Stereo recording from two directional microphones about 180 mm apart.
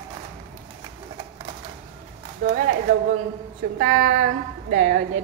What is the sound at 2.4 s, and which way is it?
Speech, 50° right (ahead or behind).